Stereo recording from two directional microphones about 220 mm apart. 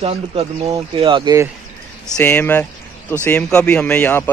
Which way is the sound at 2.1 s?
10° left (ahead or behind).